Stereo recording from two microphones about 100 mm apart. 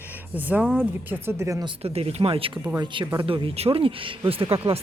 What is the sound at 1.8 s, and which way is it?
Speech, 85° right.